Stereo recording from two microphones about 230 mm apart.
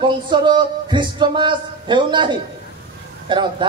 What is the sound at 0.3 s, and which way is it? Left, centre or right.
A man's voice, centre.